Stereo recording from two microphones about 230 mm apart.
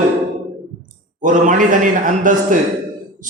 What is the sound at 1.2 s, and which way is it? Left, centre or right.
A man's voice, right.